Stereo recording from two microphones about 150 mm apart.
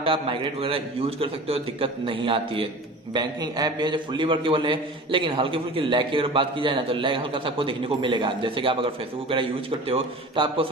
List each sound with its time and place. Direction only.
0.0 s a man's voice: 35° right (ahead or behind)